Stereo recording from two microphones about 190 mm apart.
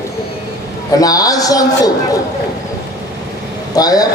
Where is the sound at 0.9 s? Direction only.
20° left (ahead or behind).